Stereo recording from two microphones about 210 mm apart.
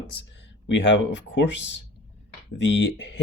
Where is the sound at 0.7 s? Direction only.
60° left (ahead or behind).